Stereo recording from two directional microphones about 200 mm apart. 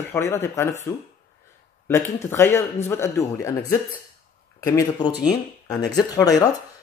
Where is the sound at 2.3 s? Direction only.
10° left (ahead or behind).